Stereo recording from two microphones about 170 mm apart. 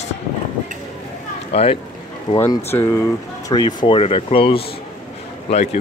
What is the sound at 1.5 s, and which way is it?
Speech, 35° left (ahead or behind).